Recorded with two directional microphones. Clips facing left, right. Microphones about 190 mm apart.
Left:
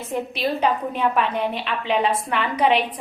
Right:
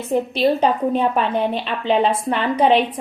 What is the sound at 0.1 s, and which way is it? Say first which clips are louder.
A woman's voice: right 7 dB; 35° right (ahead or behind).